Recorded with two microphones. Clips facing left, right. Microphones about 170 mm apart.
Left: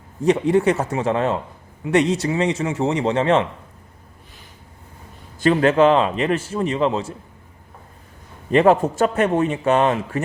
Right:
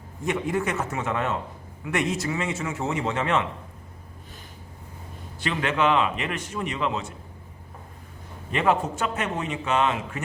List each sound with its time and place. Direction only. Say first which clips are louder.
0.3 s a man's voice: left 9 dB; 30° left (ahead or behind)
5.4 s a man's voice: left 10 dB; 40° left (ahead or behind)
8.5 s a man's voice: left 9 dB; 40° left (ahead or behind)